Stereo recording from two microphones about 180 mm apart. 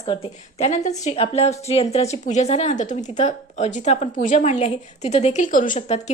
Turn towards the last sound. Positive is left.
turn(degrees=45)  # may be behind; listen again after turning